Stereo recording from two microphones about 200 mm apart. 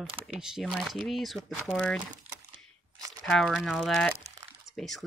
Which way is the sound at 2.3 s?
30° right (ahead or behind).